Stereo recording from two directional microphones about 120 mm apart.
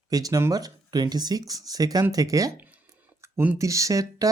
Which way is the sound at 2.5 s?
15° right (ahead or behind).